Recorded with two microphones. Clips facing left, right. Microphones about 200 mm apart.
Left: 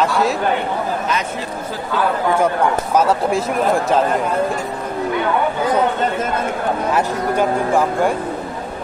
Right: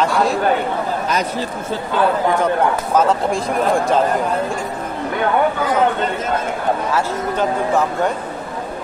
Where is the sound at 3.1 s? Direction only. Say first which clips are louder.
Left 1 dB; 5° left (ahead or behind).